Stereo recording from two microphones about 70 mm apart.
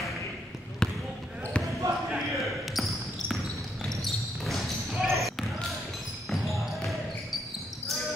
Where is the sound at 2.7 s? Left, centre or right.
Centre.